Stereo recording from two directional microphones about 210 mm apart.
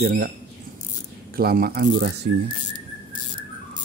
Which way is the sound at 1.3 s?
45° right (ahead or behind).